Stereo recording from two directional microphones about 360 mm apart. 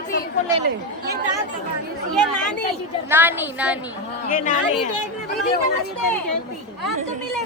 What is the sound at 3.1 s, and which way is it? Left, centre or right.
Speech, centre.